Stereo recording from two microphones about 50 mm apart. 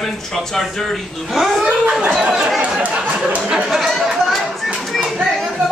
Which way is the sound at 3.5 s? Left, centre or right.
Centre.